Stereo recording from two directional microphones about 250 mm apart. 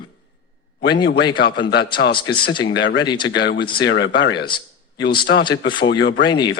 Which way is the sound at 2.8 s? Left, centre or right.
Left.